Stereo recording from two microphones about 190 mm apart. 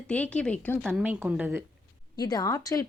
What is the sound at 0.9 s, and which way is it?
Speech, 10° right (ahead or behind).